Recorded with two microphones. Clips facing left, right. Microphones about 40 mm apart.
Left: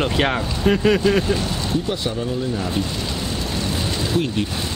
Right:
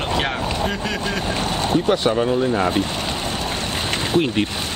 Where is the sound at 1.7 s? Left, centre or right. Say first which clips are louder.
Right 7 dB; right.